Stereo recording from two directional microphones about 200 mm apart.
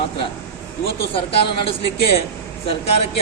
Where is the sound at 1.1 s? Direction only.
30° left (ahead or behind).